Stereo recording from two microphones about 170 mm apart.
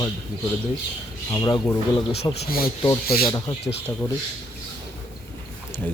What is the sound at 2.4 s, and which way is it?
Speech, 60° left (ahead or behind).